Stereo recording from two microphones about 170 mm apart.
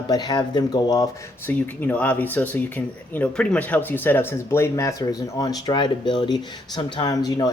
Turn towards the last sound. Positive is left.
turn(degrees=20)  # may be behind; listen again after turning